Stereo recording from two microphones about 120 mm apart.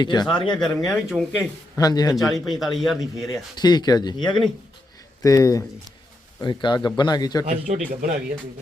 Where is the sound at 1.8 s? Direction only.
30° left (ahead or behind).